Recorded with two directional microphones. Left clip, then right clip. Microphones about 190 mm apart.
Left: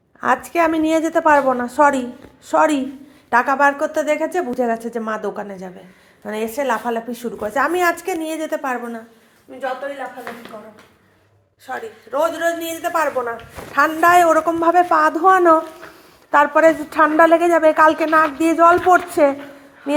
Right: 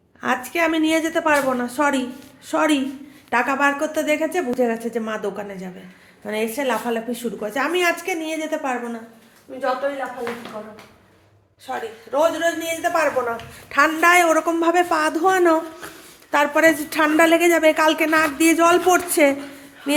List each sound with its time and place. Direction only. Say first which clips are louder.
0.2 s a woman's voice: left 4 dB; 20° left (ahead or behind)
1.3 s a woman's voice: left 5 dB; 5° left (ahead or behind)
1.6 s a woman's voice: left 6 dB; 20° left (ahead or behind)
11.6 s a woman's voice: even; 10° left (ahead or behind)